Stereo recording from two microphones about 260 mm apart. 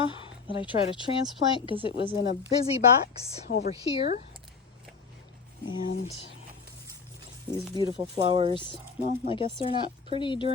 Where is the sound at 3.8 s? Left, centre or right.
Left.